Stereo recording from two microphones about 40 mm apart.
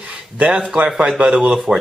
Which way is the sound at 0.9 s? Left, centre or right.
Right.